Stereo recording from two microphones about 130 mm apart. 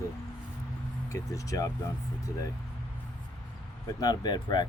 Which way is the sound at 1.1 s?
25° left (ahead or behind).